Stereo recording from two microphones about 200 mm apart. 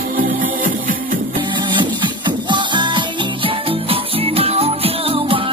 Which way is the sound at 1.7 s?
25° right (ahead or behind).